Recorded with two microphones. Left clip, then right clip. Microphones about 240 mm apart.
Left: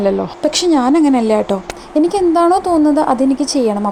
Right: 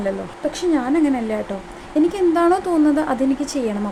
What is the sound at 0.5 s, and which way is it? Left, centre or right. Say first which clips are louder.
A woman's voice: left 7 dB; left.